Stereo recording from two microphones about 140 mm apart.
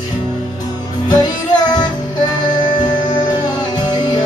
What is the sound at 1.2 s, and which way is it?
Music, 30° left (ahead or behind).